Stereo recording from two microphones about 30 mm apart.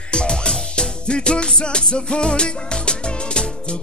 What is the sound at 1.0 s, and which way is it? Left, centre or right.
Music, left.